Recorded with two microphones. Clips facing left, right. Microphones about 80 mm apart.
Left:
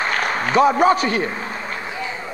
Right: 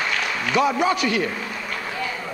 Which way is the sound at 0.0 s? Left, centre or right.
Left.